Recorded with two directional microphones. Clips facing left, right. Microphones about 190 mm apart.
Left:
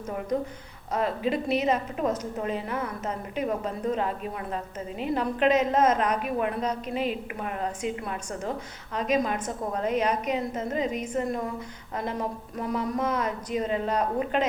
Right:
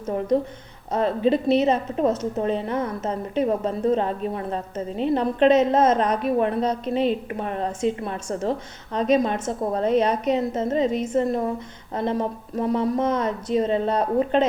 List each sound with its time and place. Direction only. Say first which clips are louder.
0.9 s a woman's voice: right 6 dB; 30° right (ahead or behind)